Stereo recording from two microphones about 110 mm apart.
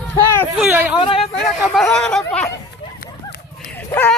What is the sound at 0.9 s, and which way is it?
Speech, 50° left (ahead or behind).